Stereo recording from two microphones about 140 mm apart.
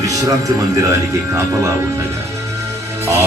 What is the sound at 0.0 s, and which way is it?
Speech, 25° right (ahead or behind).